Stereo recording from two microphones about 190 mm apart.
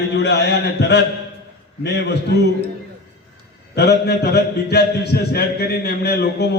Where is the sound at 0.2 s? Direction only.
65° left (ahead or behind).